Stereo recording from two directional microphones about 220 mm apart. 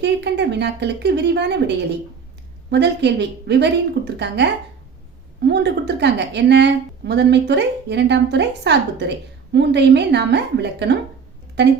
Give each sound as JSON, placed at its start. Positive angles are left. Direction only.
{"t": 0.0, "sound": "a woman's voice", "side_deg": -50}
{"t": 5.5, "sound": "a woman's voice", "side_deg": -50}